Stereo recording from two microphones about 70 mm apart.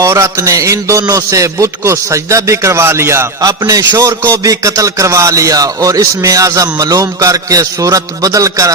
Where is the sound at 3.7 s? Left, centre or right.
Right.